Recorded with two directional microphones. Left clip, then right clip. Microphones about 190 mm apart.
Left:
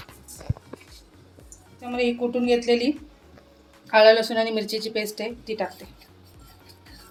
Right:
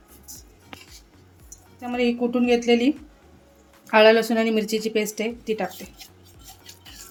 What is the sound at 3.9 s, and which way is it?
Speech, 60° right (ahead or behind).